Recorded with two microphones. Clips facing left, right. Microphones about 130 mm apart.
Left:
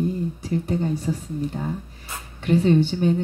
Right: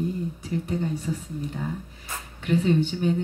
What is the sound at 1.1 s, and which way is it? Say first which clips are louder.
Speech: left 4 dB; 40° left (ahead or behind).